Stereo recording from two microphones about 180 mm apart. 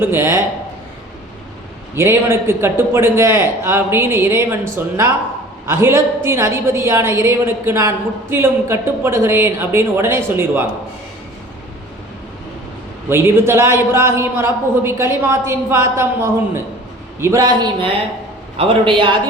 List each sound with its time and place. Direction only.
0.0 s a woman's voice: 15° right (ahead or behind)
2.0 s a woman's voice: 15° right (ahead or behind)
13.1 s a woman's voice: 15° right (ahead or behind)